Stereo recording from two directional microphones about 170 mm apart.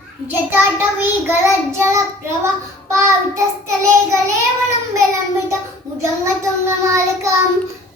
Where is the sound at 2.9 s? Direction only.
15° right (ahead or behind).